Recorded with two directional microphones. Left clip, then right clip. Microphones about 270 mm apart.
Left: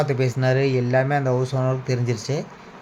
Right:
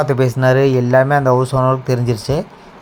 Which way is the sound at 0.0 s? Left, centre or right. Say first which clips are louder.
Right 8 dB; centre.